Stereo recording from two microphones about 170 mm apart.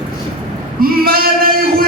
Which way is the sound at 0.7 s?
60° right (ahead or behind).